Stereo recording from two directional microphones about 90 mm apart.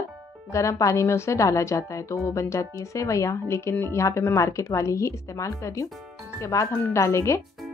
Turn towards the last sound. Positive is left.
turn(degrees=35)  # may be behind; listen again after turning